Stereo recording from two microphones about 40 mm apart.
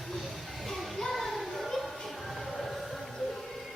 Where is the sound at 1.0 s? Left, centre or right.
Centre.